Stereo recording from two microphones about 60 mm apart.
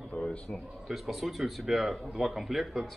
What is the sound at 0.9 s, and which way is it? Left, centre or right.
Speech, centre.